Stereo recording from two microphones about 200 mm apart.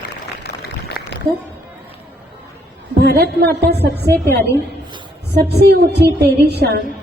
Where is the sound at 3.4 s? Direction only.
55° right (ahead or behind).